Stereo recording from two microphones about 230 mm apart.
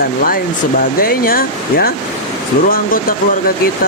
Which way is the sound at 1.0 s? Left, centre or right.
Left.